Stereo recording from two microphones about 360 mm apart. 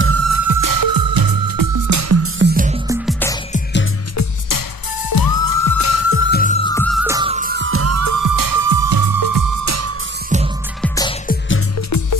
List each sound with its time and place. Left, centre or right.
0.0 s music: right
2.4 s music: right
2.9 s music: centre
4.2 s music: left
6.7 s music: centre; by 9.9 s right
10.8 s music: centre
11.3 s music: left